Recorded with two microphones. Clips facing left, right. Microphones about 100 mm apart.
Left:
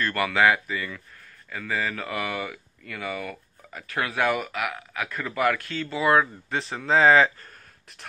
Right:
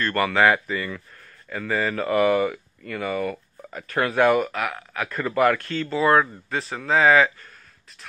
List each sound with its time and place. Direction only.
0.0 s speech: 5° left (ahead or behind)
2.3 s speech: 45° right (ahead or behind)
2.9 s speech: centre (ahead or behind)
6.9 s speech: 30° left (ahead or behind)